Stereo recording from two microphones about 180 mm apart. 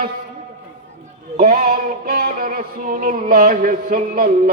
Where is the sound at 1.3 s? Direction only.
55° right (ahead or behind).